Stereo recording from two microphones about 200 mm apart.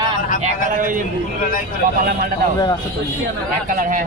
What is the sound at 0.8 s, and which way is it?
Speech, 40° right (ahead or behind).